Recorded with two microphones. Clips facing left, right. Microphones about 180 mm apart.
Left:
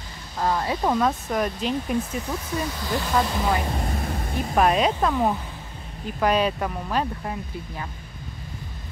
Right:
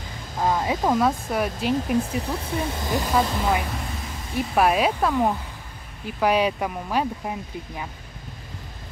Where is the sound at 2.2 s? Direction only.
30° right (ahead or behind); by 7.1 s 10° right (ahead or behind).